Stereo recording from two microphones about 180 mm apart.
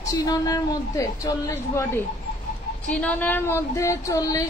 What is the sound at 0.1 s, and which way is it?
A woman's voice, 20° left (ahead or behind).